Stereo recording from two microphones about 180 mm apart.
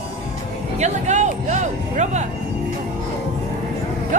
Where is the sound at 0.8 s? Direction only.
40° right (ahead or behind).